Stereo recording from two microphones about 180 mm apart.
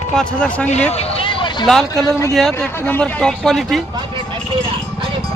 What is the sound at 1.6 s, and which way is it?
Speech, centre (ahead or behind).